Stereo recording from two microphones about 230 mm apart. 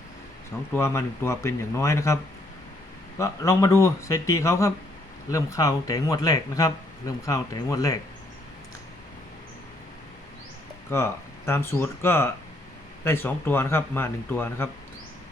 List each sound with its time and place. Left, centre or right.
0.7 s speech: centre
3.2 s speech: centre
10.8 s speech: centre